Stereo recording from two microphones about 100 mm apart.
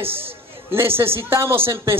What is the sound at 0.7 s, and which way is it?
Speech, 25° right (ahead or behind).